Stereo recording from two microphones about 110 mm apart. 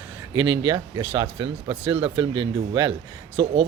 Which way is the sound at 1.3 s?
50° right (ahead or behind).